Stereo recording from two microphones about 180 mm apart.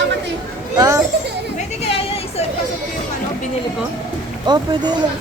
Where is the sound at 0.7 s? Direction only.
15° right (ahead or behind).